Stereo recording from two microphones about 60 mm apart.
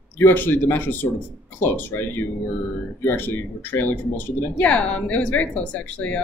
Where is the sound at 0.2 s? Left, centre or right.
Left.